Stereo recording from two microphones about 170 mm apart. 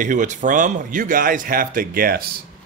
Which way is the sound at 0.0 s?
50° right (ahead or behind).